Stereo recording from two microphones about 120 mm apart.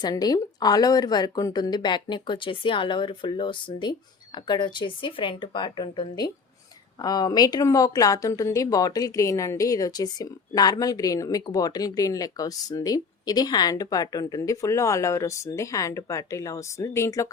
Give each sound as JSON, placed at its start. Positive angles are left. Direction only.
{"t": 0.0, "sound": "a woman's voice", "side_deg": 35}